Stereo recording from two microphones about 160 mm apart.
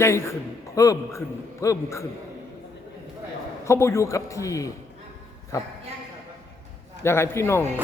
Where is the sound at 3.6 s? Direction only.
15° left (ahead or behind).